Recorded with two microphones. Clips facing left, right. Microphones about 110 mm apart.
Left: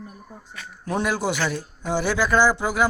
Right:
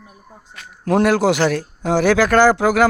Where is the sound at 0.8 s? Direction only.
85° right.